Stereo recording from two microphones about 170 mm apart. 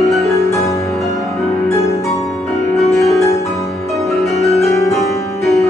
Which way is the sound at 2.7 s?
Centre (ahead or behind).